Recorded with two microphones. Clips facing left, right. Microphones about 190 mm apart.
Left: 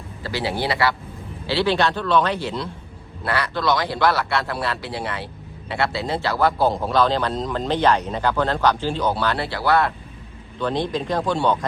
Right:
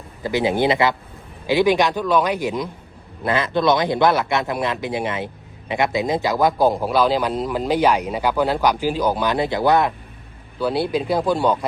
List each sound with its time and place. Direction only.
0.2 s speech: 20° right (ahead or behind)